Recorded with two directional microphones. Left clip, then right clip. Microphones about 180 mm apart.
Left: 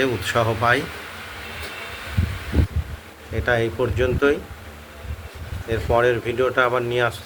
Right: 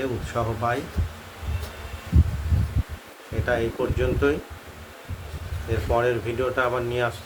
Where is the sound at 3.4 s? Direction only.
20° left (ahead or behind).